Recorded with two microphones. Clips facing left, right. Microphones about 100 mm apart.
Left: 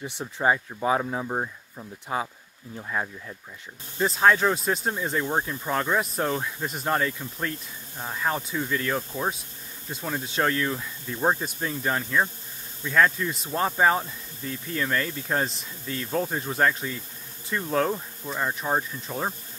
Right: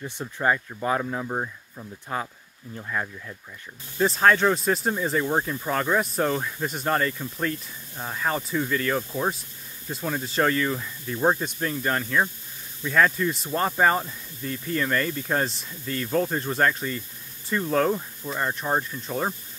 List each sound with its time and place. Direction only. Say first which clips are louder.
0.0 s speech: left 1 dB; 15° left (ahead or behind)
4.0 s speech: right 1 dB; centre (ahead or behind)